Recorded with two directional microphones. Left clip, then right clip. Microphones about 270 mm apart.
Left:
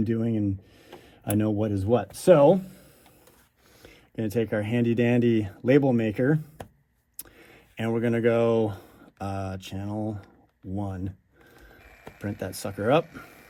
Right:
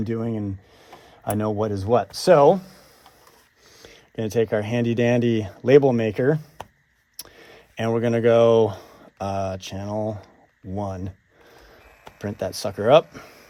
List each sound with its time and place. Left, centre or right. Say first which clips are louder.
0.0 s speech: even; right
3.8 s speech: right 3 dB; right
12.2 s speech: right 6 dB; right